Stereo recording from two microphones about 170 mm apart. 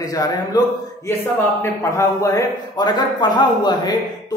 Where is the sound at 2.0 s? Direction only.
20° left (ahead or behind).